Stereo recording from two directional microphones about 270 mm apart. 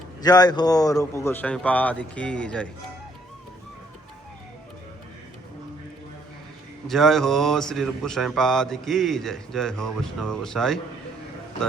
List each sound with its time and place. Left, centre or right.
0.2 s speech: centre
6.8 s speech: centre